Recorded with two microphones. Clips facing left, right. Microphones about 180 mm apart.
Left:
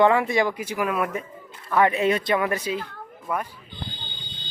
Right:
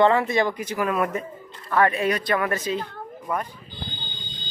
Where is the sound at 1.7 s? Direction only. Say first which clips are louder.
Left 1 dB; 20° left (ahead or behind).